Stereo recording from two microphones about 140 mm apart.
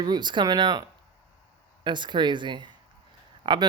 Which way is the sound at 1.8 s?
35° right (ahead or behind).